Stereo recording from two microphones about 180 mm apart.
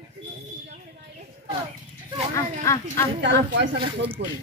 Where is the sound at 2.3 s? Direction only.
15° left (ahead or behind).